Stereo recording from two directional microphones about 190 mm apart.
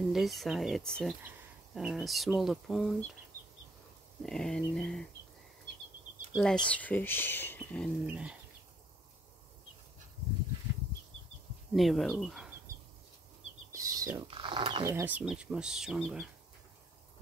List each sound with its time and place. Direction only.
0.1 s speech: centre (ahead or behind)
4.2 s speech: 5° left (ahead or behind)
6.3 s speech: 5° left (ahead or behind)
8.1 s speech: 5° right (ahead or behind)
11.7 s speech: centre (ahead or behind)
13.7 s a sound: 20° right (ahead or behind)
14.2 s speech: 25° right (ahead or behind); by 16.3 s centre (ahead or behind)